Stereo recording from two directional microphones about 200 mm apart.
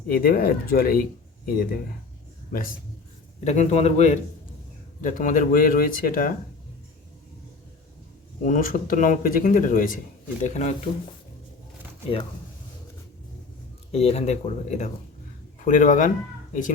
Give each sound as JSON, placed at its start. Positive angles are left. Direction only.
{"t": 0.1, "sound": "a man's voice", "side_deg": 45}
{"t": 8.4, "sound": "speech", "side_deg": 40}
{"t": 13.9, "sound": "speech", "side_deg": 30}